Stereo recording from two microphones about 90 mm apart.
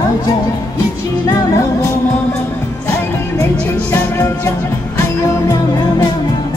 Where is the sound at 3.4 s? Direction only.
30° left (ahead or behind).